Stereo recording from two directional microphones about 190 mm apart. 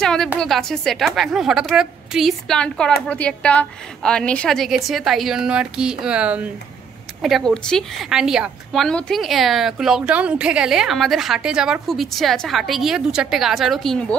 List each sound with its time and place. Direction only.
0.0 s a woman's voice: 5° left (ahead or behind)